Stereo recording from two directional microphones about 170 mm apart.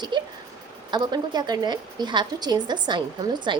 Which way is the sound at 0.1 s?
25° right (ahead or behind).